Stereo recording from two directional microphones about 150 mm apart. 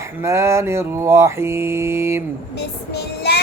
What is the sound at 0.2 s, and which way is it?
Mantra, 20° right (ahead or behind).